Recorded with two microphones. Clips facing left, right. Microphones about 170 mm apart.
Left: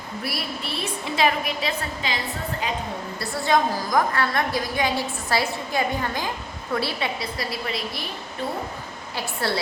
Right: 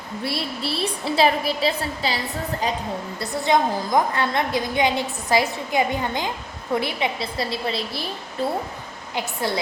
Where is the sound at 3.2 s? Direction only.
20° right (ahead or behind).